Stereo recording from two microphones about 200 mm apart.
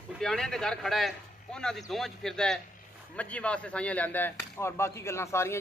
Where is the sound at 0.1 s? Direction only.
5° left (ahead or behind).